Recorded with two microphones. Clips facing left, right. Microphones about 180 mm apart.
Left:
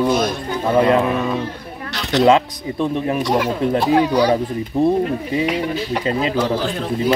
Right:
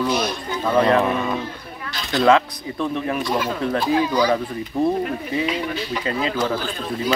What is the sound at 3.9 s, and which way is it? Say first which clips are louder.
Speech: left 4 dB; 65° left (ahead or behind).